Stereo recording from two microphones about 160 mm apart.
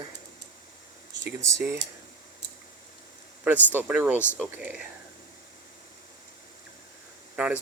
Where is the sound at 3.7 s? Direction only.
10° right (ahead or behind).